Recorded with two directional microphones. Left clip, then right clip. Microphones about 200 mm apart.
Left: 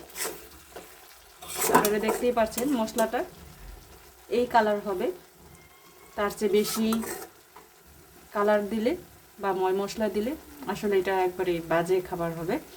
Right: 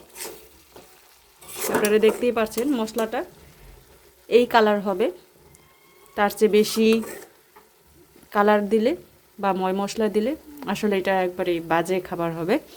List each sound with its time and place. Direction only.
1.9 s speech: 35° right (ahead or behind)
4.3 s a woman's voice: 45° right (ahead or behind)
6.1 s speech: 40° right (ahead or behind)
8.3 s speech: 40° right (ahead or behind)